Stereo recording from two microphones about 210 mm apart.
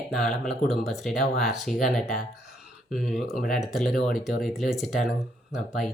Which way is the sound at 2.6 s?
Centre (ahead or behind).